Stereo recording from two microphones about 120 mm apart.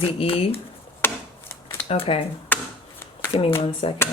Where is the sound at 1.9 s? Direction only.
55° left (ahead or behind).